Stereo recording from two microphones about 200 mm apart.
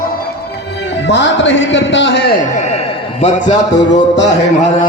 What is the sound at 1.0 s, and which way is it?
A man's voice, 60° left (ahead or behind).